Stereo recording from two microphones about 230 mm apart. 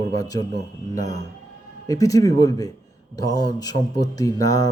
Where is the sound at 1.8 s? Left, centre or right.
Centre.